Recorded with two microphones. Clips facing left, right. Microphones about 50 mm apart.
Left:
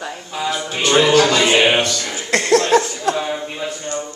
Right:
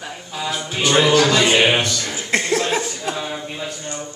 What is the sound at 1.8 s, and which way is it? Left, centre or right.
Speech, centre.